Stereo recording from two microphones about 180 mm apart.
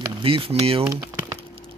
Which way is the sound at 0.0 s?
30° right (ahead or behind).